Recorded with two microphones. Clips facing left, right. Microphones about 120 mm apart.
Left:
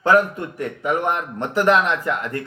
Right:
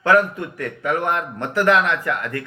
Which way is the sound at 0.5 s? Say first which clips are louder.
Left 1 dB; 20° left (ahead or behind).